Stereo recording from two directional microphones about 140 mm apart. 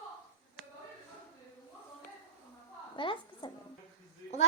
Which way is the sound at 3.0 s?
35° left (ahead or behind).